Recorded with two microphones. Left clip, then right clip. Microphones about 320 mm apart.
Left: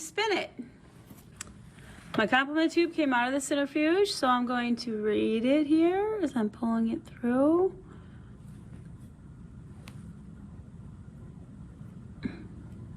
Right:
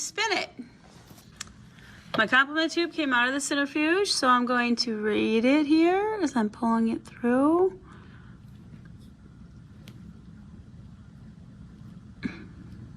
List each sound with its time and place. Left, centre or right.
0.0 s a woman's voice: centre
2.1 s speech: centre